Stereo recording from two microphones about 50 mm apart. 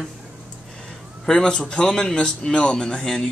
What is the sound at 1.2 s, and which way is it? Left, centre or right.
Speech, centre.